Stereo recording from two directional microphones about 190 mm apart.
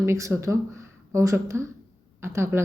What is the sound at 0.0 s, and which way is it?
A woman's voice, 15° right (ahead or behind).